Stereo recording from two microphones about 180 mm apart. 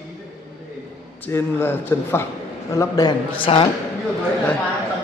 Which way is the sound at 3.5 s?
30° left (ahead or behind).